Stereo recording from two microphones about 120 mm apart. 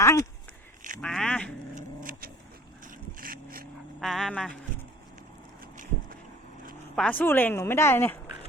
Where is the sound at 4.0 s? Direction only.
5° left (ahead or behind).